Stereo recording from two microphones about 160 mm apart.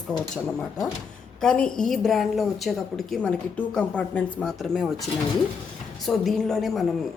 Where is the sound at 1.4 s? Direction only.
5° left (ahead or behind).